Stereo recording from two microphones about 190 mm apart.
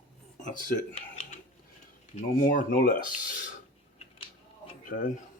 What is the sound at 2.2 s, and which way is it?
Speech, 45° left (ahead or behind).